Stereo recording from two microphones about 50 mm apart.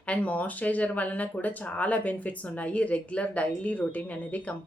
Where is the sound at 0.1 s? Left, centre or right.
Left.